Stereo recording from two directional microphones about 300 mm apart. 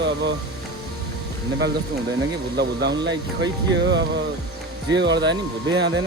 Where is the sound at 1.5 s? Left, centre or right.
Right.